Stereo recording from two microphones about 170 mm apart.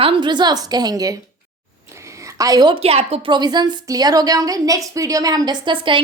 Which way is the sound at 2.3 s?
20° right (ahead or behind).